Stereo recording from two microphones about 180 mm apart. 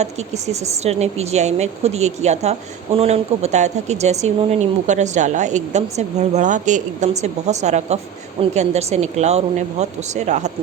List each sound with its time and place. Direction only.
0.0 s a woman's voice: 40° right (ahead or behind)